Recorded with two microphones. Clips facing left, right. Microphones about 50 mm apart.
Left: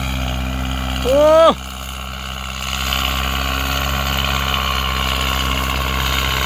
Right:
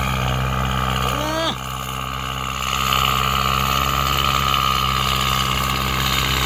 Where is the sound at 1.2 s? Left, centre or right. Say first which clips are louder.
Left 13 dB; left.